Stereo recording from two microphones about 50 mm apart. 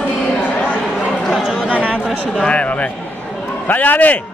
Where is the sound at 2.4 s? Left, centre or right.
Left.